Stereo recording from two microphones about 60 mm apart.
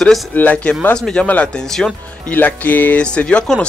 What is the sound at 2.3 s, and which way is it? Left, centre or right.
Speech, left.